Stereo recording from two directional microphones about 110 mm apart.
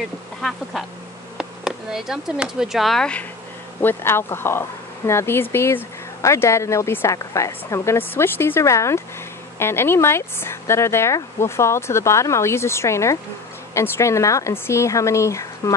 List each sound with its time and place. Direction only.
0.4 s duck: 5° left (ahead or behind)
1.4 s speech: 5° right (ahead or behind)
3.8 s speech: 20° left (ahead or behind)